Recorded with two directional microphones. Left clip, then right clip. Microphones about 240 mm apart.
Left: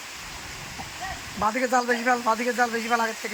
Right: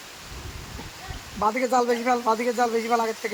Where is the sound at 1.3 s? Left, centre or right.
Right.